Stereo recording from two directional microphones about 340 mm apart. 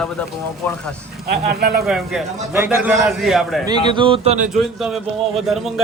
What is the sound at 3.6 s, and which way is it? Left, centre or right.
Speech, centre.